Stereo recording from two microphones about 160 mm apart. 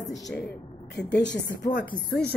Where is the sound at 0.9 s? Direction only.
90° left.